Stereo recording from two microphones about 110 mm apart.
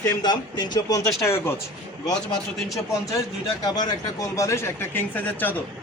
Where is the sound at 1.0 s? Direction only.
25° left (ahead or behind).